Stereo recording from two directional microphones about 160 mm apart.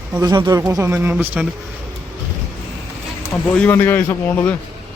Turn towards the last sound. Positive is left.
turn(degrees=10)  # may be behind; listen again after turning